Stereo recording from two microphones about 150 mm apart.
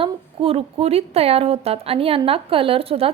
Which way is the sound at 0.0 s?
40° right (ahead or behind).